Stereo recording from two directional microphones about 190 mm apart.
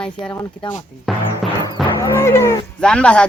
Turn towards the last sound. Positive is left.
turn(degrees=5)  # may be behind; listen again after turning